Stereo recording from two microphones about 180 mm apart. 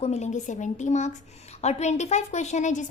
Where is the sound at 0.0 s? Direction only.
40° left (ahead or behind).